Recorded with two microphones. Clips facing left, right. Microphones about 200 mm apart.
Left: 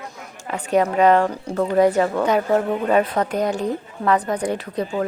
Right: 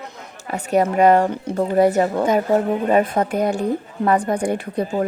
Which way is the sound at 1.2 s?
25° right (ahead or behind).